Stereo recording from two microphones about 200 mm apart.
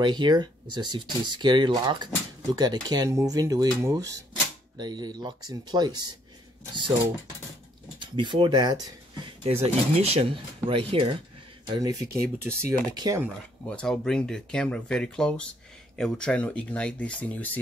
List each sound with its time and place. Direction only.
0.0 s speech: 20° right (ahead or behind)
8.0 s speech: 25° right (ahead or behind)
9.4 s speech: 30° right (ahead or behind)
13.7 s speech: 5° left (ahead or behind)